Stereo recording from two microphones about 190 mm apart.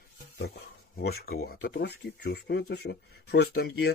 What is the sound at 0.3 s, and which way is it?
Speech, 60° left (ahead or behind).